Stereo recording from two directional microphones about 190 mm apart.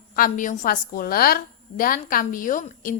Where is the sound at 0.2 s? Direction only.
40° left (ahead or behind).